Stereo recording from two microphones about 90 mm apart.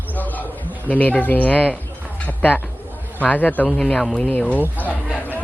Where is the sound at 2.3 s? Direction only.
20° left (ahead or behind).